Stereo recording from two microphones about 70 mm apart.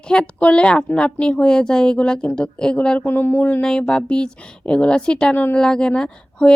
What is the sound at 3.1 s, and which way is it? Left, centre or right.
Speech, left.